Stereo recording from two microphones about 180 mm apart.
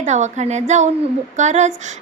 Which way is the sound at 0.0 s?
40° right (ahead or behind).